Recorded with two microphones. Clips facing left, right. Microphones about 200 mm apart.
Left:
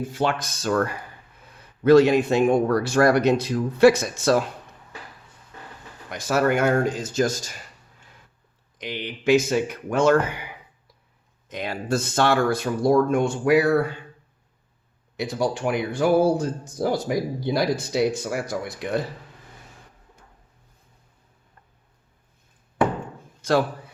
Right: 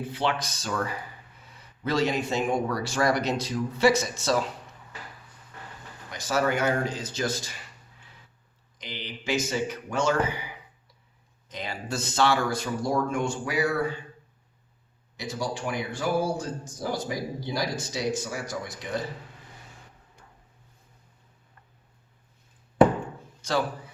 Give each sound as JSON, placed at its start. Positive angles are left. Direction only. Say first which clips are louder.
{"t": 0.0, "sound": "speech", "louder": "left 4 dB", "side_deg": 45}
{"t": 6.1, "sound": "speech", "louder": "left 5 dB", "side_deg": 55}
{"t": 8.8, "sound": "speech", "louder": "left 9 dB", "side_deg": 55}
{"t": 15.1, "sound": "speech", "louder": "left 7 dB", "side_deg": 60}
{"t": 23.4, "sound": "a sound", "louder": "left 6 dB", "side_deg": 55}